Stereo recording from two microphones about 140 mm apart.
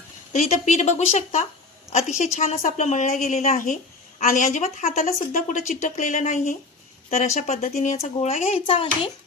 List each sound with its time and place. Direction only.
0.3 s a woman's voice: 55° left (ahead or behind); by 9.1 s 40° left (ahead or behind)